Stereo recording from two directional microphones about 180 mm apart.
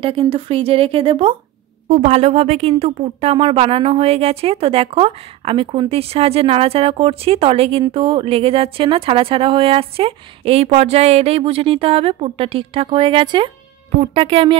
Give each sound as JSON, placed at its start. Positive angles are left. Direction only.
{"t": 0.0, "sound": "speech", "side_deg": -30}